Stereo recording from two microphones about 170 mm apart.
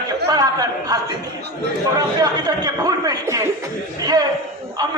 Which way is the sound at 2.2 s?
20° right (ahead or behind).